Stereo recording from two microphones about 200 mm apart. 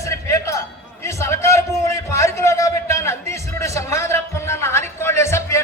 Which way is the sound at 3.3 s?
15° left (ahead or behind).